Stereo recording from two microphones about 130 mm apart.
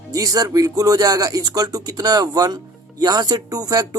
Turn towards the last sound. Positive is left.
turn(degrees=-30)  # may be behind; listen again after turning